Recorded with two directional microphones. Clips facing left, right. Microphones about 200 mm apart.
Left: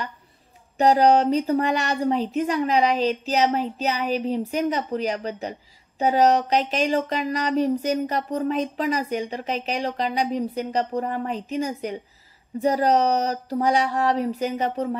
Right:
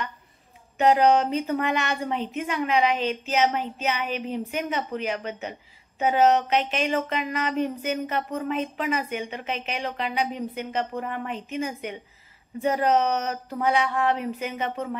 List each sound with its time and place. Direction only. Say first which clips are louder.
0.7 s speech: left 2 dB; 35° left (ahead or behind)